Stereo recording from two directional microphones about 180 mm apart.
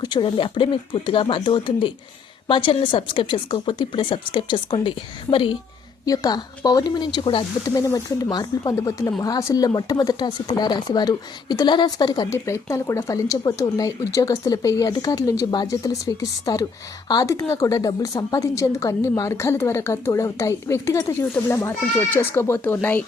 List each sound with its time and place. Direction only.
0.0 s speech: 25° left (ahead or behind)
7.6 s a woman's voice: 15° left (ahead or behind)